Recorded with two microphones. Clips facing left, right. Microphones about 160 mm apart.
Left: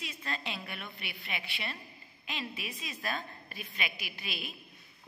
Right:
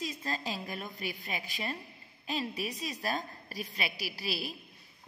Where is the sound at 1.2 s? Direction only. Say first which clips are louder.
Right 3 dB; 40° right (ahead or behind).